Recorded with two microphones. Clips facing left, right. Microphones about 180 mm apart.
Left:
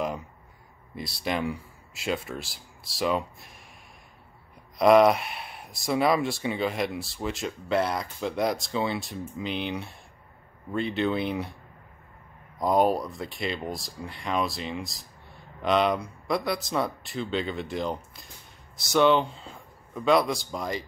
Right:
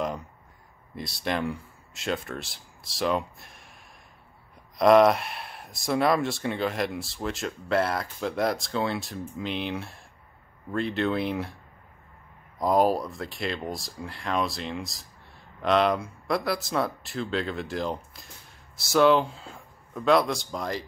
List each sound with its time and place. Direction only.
0.0 s crow: centre (ahead or behind)
0.9 s speech: centre (ahead or behind)
4.7 s speech: centre (ahead or behind)
12.5 s speech: centre (ahead or behind)